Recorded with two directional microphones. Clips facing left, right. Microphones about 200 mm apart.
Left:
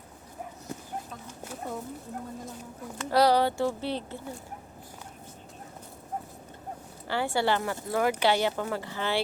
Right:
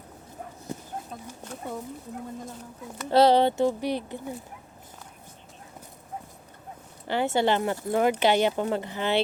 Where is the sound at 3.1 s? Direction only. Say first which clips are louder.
Right 4 dB; 25° right (ahead or behind).